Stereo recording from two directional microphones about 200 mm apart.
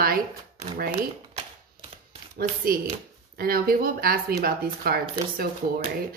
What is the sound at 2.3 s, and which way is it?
Speech, 45° right (ahead or behind).